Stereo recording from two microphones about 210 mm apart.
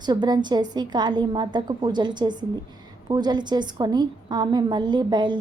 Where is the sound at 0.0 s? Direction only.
20° right (ahead or behind).